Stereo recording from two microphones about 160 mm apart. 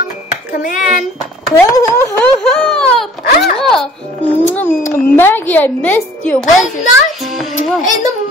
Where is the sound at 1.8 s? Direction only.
20° left (ahead or behind).